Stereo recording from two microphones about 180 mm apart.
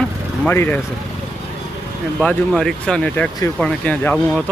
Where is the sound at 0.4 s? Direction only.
10° left (ahead or behind).